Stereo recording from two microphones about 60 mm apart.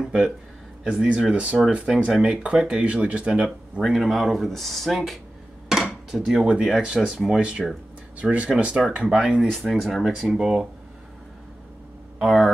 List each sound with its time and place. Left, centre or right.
0.0 s speech: centre
1.9 s speech: centre
3.8 s speech: centre; by 8.8 s right
9.4 s speech: centre
12.2 s speech: centre